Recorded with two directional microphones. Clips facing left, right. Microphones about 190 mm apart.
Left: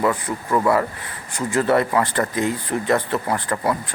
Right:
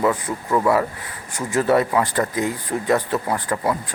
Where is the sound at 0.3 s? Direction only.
5° right (ahead or behind).